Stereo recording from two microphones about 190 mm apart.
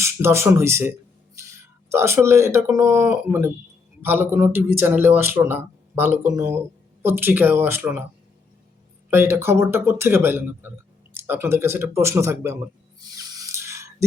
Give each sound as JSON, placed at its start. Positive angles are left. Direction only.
{"t": 0.0, "sound": "speech", "side_deg": -15}
{"t": 9.0, "sound": "speech", "side_deg": -10}
{"t": 13.1, "sound": "a sound", "side_deg": -20}